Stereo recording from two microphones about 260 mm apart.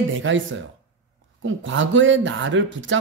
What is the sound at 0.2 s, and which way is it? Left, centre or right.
Speech, right.